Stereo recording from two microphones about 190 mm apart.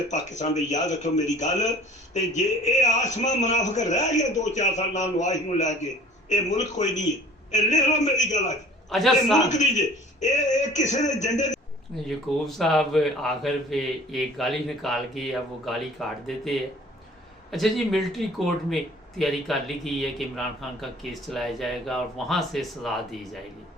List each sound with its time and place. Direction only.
0.1 s a man's voice: 40° left (ahead or behind)
2.8 s a man's voice: 35° left (ahead or behind)
8.9 s a man's voice: centre (ahead or behind)
9.5 s a man's voice: 40° left (ahead or behind)
12.0 s a man's voice: centre (ahead or behind)